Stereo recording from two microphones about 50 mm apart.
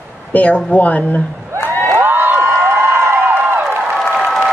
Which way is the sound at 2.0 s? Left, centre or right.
Right.